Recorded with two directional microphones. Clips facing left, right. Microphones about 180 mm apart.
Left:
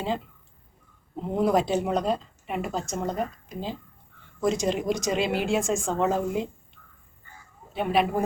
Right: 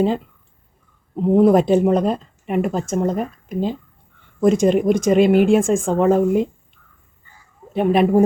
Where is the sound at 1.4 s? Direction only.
50° right (ahead or behind).